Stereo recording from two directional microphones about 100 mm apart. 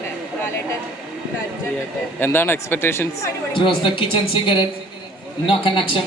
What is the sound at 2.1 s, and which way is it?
Speech, 20° left (ahead or behind).